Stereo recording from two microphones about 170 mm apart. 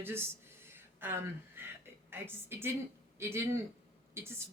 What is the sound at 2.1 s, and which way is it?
A woman's voice, 15° right (ahead or behind).